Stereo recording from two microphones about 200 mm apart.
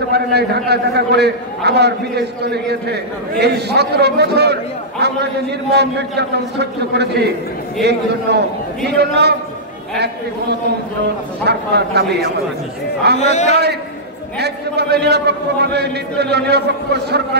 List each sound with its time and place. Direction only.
0.1 s a man's voice: 55° right (ahead or behind)
11.4 s a man's voice: 55° right (ahead or behind)
13.2 s a man's voice: 35° left (ahead or behind)
13.5 s a man's voice: 55° right (ahead or behind)